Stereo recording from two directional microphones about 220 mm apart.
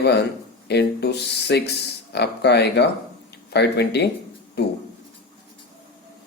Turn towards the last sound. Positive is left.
turn(degrees=50)  # may be behind; listen again after turning